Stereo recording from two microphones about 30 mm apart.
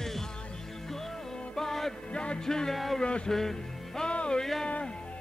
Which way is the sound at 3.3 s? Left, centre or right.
Centre.